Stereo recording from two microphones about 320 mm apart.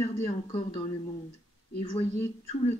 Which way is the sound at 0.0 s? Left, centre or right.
Centre.